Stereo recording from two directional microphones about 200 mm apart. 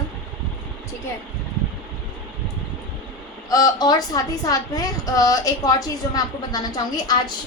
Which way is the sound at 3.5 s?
20° left (ahead or behind).